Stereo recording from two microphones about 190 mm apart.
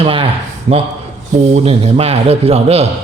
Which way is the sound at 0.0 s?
30° right (ahead or behind).